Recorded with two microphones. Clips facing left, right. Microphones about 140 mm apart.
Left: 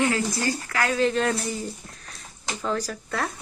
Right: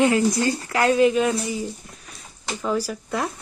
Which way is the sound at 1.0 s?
5° right (ahead or behind).